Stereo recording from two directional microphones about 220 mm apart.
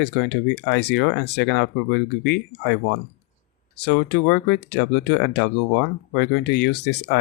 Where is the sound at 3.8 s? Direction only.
50° left (ahead or behind).